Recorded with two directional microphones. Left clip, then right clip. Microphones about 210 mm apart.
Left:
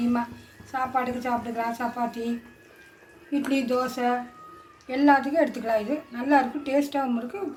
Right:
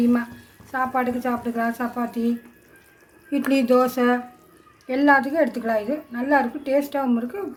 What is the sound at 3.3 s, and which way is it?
Speech, 35° right (ahead or behind).